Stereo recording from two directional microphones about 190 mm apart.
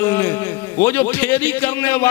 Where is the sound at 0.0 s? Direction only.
20° left (ahead or behind).